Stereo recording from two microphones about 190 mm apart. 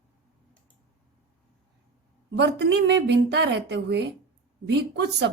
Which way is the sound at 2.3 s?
60° right (ahead or behind).